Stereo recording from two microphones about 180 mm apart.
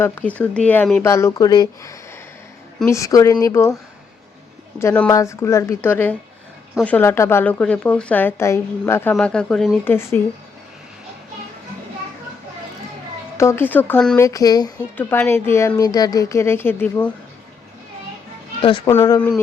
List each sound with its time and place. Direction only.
0.0 s speech: 10° left (ahead or behind)
4.8 s speech: 15° left (ahead or behind)
13.3 s speech: 15° left (ahead or behind)
14.2 s speech: 20° left (ahead or behind)
14.9 s speech: 10° left (ahead or behind)
18.9 s speech: 15° left (ahead or behind)